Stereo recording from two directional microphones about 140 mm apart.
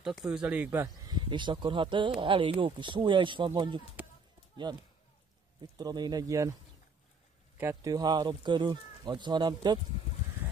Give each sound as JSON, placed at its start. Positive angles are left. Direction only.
{"t": 0.0, "sound": "speech", "side_deg": -5}
{"t": 1.0, "sound": "speech", "side_deg": -30}
{"t": 5.6, "sound": "speech", "side_deg": -30}
{"t": 7.5, "sound": "speech", "side_deg": -20}